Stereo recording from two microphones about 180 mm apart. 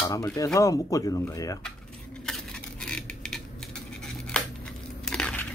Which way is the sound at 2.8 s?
5° left (ahead or behind).